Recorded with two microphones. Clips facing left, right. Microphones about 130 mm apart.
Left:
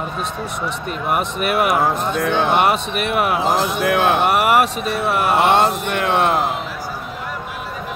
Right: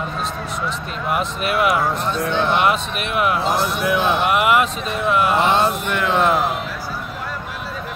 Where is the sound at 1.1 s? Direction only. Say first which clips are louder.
Left 1 dB; 55° left (ahead or behind).